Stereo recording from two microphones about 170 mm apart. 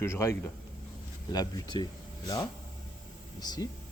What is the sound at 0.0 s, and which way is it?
A man's voice, 15° left (ahead or behind).